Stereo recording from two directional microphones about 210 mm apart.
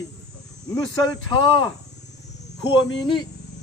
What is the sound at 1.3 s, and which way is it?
Speech, 20° left (ahead or behind).